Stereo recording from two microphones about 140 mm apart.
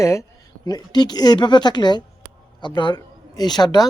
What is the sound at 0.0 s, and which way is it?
A woman's voice, 20° left (ahead or behind).